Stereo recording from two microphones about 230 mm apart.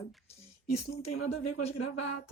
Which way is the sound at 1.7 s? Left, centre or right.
Left.